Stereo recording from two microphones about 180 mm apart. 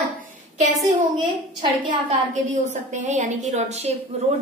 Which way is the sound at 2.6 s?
40° right (ahead or behind).